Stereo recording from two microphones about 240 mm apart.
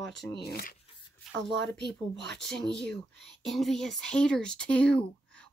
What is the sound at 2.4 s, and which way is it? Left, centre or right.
Speech, centre.